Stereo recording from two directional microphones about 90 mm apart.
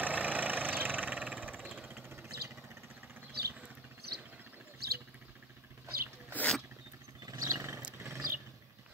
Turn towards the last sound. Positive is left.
turn(degrees=-30)  # may be behind; listen again after turning